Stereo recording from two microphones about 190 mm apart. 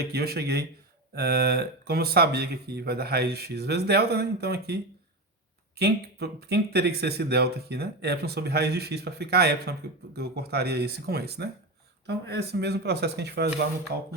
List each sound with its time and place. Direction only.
0.1 s speech: 55° right (ahead or behind)